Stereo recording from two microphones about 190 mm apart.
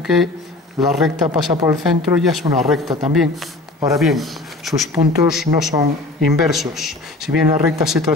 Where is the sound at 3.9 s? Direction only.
Centre (ahead or behind).